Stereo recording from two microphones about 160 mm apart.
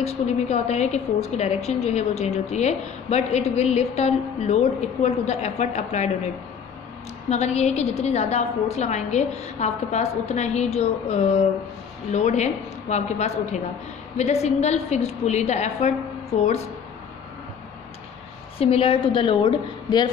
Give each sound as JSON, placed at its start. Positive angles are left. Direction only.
{"t": 0.0, "sound": "a woman's voice", "side_deg": 45}
{"t": 7.2, "sound": "a woman's voice", "side_deg": 40}
{"t": 18.6, "sound": "a woman's voice", "side_deg": 35}